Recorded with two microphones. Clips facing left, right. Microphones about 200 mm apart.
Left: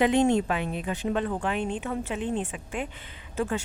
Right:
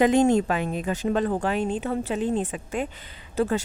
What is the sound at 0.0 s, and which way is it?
Speech, 45° right (ahead or behind).